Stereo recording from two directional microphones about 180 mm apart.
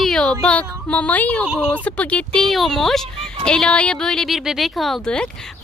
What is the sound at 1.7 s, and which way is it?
Speech, 5° left (ahead or behind).